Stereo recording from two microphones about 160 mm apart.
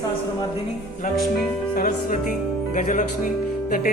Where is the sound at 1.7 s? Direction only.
65° left (ahead or behind).